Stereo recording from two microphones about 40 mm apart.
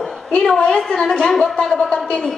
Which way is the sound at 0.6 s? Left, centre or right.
Left.